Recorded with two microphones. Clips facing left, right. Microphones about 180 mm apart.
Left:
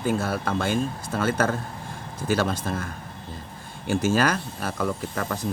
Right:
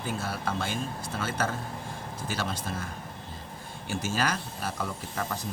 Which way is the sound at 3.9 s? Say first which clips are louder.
Left 8 dB; 50° left (ahead or behind).